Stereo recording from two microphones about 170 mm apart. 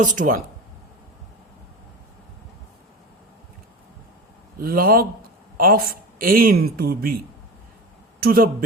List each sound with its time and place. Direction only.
0.0 s speech: 50° right (ahead or behind)
4.6 s a man's voice: 60° right (ahead or behind)
8.2 s a man's voice: 60° right (ahead or behind)